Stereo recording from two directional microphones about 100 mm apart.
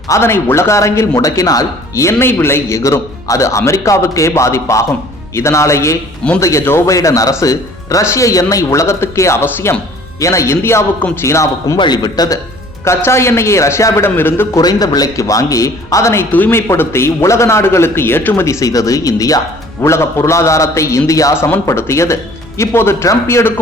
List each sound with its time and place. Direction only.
0.1 s speech: 25° left (ahead or behind)
11.8 s speech: 45° left (ahead or behind)
13.1 s speech: 25° left (ahead or behind)
14.6 s speech: 40° left (ahead or behind)
16.3 s speech: 20° left (ahead or behind)
18.4 s speech: 35° left (ahead or behind)